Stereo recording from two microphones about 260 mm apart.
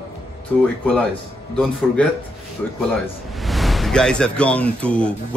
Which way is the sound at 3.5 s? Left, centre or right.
Centre.